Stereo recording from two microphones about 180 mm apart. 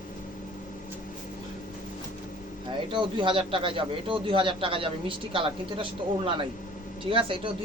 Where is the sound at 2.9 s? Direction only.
25° right (ahead or behind).